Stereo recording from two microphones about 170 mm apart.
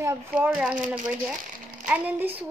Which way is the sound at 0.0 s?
15° right (ahead or behind).